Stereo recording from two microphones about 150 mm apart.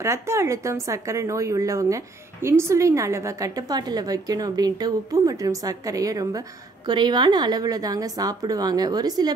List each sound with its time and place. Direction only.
0.0 s speech: 20° right (ahead or behind)